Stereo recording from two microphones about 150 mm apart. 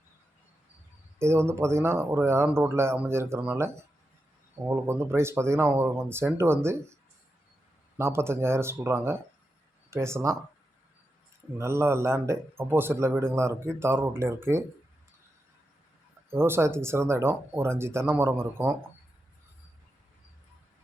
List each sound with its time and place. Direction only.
1.2 s a man's voice: 15° right (ahead or behind)
11.5 s a man's voice: 15° right (ahead or behind)
16.3 s a man's voice: 15° right (ahead or behind)